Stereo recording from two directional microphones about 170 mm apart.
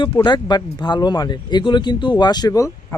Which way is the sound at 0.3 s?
25° left (ahead or behind).